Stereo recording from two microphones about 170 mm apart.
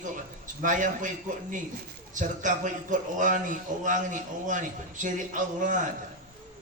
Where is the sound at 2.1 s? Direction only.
50° right (ahead or behind).